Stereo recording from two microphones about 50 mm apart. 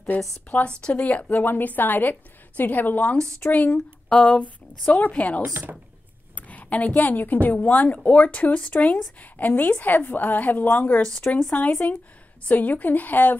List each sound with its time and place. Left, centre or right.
0.5 s a woman's voice: left
0.9 s a woman's voice: left
3.4 s a woman's voice: centre; by 13.4 s left